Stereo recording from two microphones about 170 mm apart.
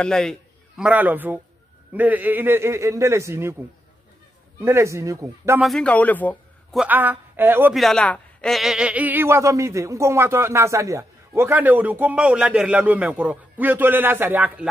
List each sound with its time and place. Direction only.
0.0 s a man's voice: 5° left (ahead or behind); by 3.5 s 15° right (ahead or behind)
4.6 s speech: 15° right (ahead or behind)
5.6 s a man's voice: 5° left (ahead or behind)
6.8 s speech: 10° right (ahead or behind)
7.7 s speech: centre (ahead or behind)